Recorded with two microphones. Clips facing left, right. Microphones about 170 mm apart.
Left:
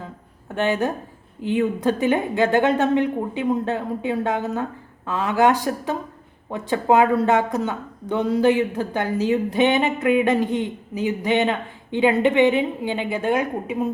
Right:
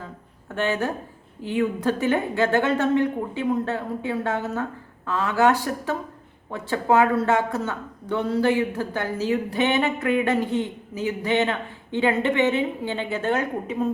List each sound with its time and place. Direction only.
0.5 s speech: 15° left (ahead or behind)